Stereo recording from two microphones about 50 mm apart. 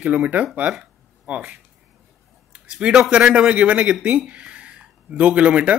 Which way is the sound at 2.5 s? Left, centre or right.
Centre.